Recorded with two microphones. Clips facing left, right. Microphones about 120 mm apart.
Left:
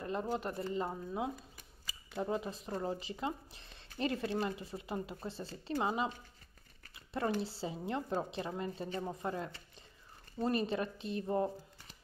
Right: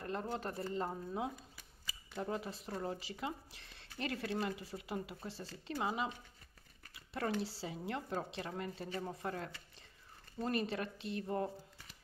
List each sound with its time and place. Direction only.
0.0 s speech: 15° left (ahead or behind)